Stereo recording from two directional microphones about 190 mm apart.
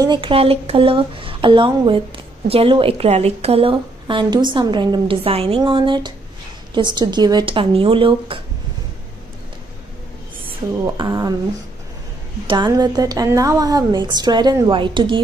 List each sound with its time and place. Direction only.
0.0 s speech: 25° right (ahead or behind)
11.0 s speech: 20° right (ahead or behind)
12.6 s speech: 20° right (ahead or behind)